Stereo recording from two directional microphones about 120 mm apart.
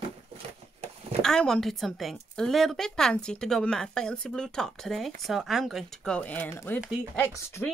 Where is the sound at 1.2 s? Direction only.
5° left (ahead or behind); by 7.6 s 20° left (ahead or behind).